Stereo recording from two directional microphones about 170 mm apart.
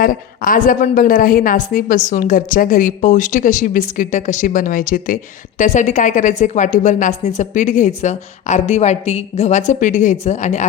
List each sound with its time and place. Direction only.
0.0 s a woman's voice: 55° left (ahead or behind)